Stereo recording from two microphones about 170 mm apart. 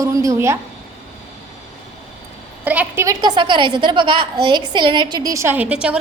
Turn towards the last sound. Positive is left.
turn(degrees=-5)  # may be behind; listen again after turning